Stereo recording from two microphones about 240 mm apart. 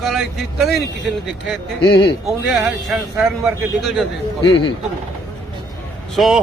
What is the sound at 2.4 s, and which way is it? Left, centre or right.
Speech, centre.